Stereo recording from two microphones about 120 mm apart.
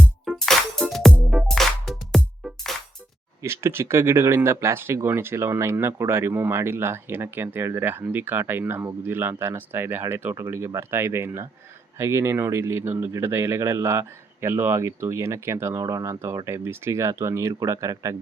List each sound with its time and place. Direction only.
0.3 s music: 5° left (ahead or behind)
3.4 s speech: 20° right (ahead or behind)